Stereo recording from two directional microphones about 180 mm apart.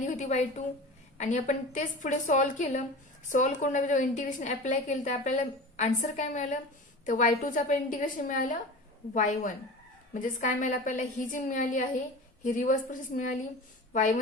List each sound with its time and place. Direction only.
0.0 s a woman's voice: 45° left (ahead or behind)